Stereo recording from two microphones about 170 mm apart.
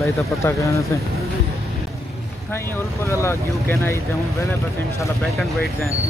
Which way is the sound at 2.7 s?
15° left (ahead or behind).